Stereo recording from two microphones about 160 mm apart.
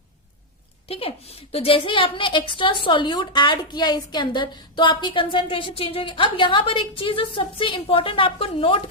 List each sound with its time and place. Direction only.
0.9 s a woman's voice: 35° left (ahead or behind)